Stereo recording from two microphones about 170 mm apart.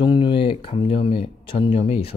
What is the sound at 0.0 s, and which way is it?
Speech, 25° left (ahead or behind).